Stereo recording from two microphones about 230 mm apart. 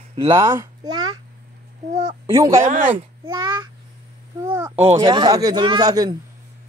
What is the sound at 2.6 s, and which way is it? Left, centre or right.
Speech, right.